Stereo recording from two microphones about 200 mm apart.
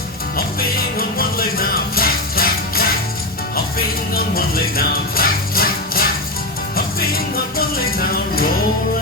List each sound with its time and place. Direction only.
0.9 s music: 50° left (ahead or behind)